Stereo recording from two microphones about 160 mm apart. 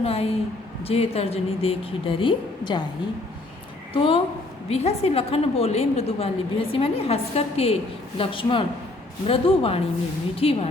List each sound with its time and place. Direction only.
0.0 s a woman's voice: 40° left (ahead or behind)
3.9 s a woman's voice: 35° left (ahead or behind)